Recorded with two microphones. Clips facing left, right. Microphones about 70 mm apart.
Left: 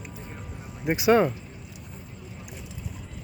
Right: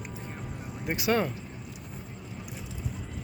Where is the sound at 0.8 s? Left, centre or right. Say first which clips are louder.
Left 7 dB; left.